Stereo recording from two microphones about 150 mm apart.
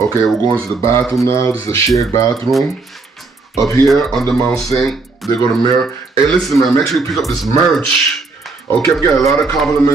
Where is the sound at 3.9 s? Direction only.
Centre (ahead or behind).